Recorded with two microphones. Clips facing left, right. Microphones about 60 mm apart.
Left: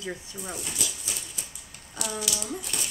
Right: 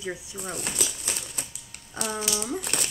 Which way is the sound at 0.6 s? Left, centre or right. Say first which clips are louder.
Right 3 dB; right.